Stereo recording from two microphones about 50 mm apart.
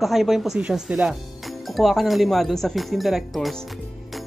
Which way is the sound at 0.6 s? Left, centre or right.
Centre.